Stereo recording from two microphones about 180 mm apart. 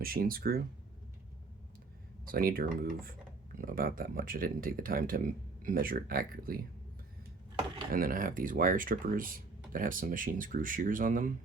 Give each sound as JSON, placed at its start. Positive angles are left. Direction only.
{"t": 0.0, "sound": "speech", "side_deg": -55}
{"t": 2.2, "sound": "speech", "side_deg": -55}
{"t": 7.9, "sound": "speech", "side_deg": -50}